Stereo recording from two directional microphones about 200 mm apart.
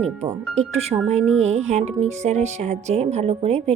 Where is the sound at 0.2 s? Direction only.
35° right (ahead or behind).